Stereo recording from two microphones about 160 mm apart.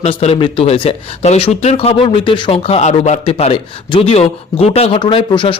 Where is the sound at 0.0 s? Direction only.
40° left (ahead or behind).